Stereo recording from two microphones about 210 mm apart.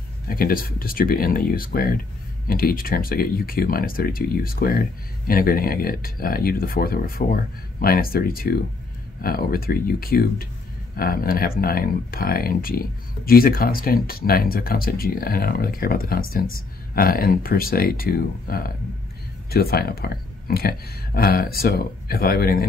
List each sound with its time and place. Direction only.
0.3 s speech: 45° left (ahead or behind)